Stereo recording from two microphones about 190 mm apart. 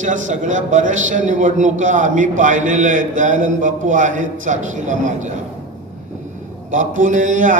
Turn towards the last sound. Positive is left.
turn(degrees=-40)  # may be behind; listen again after turning